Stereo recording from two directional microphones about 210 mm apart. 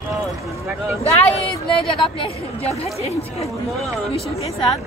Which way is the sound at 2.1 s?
25° left (ahead or behind).